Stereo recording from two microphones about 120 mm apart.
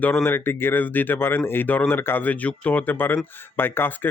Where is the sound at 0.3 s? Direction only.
20° left (ahead or behind).